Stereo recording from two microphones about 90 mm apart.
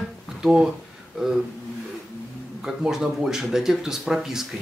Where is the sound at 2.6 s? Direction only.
5° right (ahead or behind).